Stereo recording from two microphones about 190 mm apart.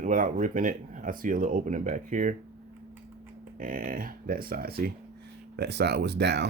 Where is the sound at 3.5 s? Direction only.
45° right (ahead or behind); by 6.4 s 60° right (ahead or behind).